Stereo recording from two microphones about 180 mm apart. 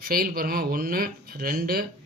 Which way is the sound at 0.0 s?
55° right (ahead or behind).